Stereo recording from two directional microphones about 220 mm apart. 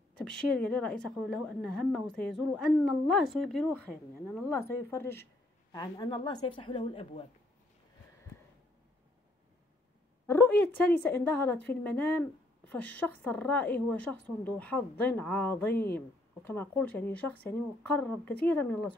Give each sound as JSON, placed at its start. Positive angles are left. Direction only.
{"t": 0.2, "sound": "a woman's voice", "side_deg": 5}
{"t": 10.2, "sound": "a woman's voice", "side_deg": 10}